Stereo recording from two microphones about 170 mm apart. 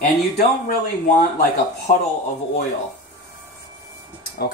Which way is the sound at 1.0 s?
60° left (ahead or behind).